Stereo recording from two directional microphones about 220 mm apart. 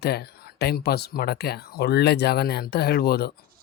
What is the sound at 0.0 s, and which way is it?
Speech, 45° left (ahead or behind).